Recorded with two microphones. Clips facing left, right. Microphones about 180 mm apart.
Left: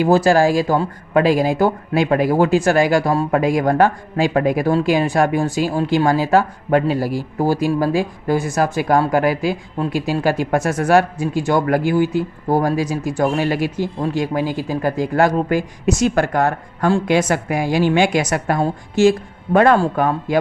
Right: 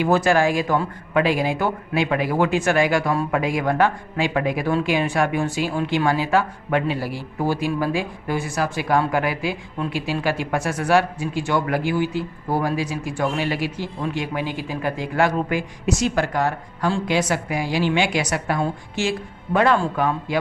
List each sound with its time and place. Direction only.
0.0 s a man's voice: 35° left (ahead or behind)